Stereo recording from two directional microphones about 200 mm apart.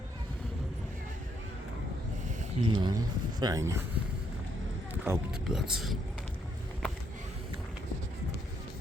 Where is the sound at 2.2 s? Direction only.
35° right (ahead or behind).